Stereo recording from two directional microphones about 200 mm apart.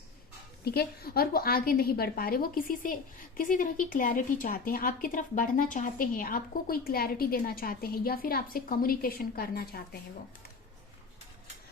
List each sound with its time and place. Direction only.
0.6 s a woman's voice: 50° left (ahead or behind)